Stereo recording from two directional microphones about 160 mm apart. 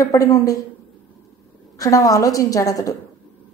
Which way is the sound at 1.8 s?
20° left (ahead or behind).